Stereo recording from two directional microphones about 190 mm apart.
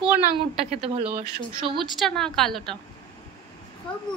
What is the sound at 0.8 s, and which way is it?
Speech, 30° right (ahead or behind).